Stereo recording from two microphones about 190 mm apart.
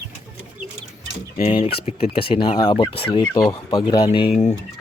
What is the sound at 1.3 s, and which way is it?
Speech, 30° left (ahead or behind).